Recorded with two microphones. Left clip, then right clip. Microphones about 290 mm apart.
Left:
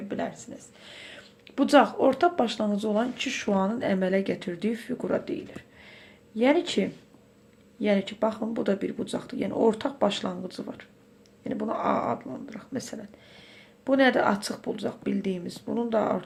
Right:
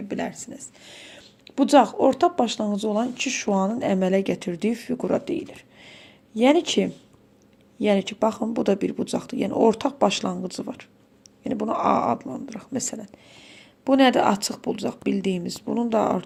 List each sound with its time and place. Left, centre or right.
0.1 s speech: right